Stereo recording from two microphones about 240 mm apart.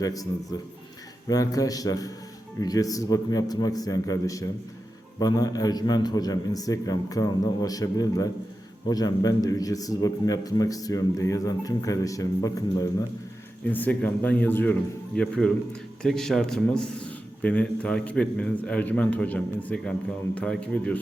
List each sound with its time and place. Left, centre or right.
0.0 s a man's voice: centre